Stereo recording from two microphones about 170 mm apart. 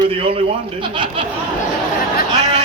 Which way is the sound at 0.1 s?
30° right (ahead or behind).